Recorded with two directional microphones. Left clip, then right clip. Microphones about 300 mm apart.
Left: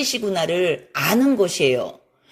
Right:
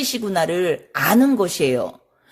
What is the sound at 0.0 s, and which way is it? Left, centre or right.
Speech, right.